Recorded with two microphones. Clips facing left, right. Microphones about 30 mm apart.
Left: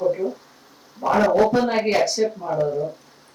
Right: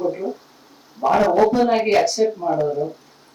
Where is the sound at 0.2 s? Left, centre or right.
Right.